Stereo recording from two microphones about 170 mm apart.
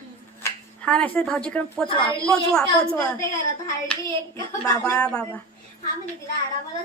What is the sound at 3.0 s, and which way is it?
Speech, 15° left (ahead or behind).